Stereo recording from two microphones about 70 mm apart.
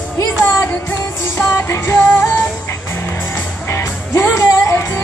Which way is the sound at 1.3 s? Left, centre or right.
Left.